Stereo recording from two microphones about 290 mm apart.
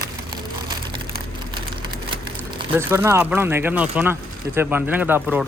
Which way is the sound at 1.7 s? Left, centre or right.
Centre.